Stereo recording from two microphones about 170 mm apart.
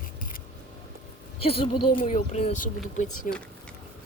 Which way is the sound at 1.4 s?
35° left (ahead or behind).